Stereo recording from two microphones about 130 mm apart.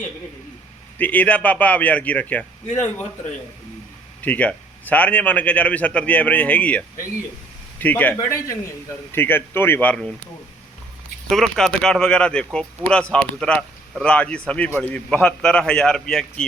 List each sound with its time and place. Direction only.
0.9 s a man's voice: 10° left (ahead or behind)
4.2 s a man's voice: 10° left (ahead or behind)
8.3 s a man's voice: 25° left (ahead or behind); by 10.2 s 10° left (ahead or behind)
11.3 s a man's voice: centre (ahead or behind)